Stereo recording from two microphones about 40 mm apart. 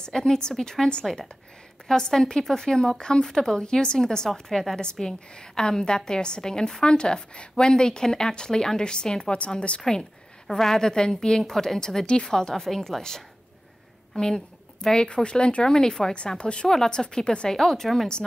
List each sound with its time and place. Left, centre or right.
0.0 s speech: centre
1.0 s speech: centre
1.9 s speech: centre
4.3 s a woman's voice: centre; by 9.8 s left
9.8 s a woman's voice: centre
15.1 s speech: left
16.3 s a woman's voice: left
16.6 s a woman's voice: centre
17.6 s speech: centre